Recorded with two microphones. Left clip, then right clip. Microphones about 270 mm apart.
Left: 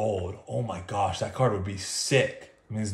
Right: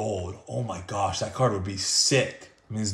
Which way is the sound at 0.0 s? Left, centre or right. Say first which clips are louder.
Left 2 dB; centre.